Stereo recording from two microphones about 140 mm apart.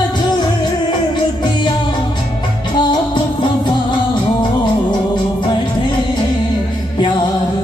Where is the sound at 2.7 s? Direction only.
30° left (ahead or behind).